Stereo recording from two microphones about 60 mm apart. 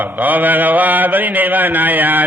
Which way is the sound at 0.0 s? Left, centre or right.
Right.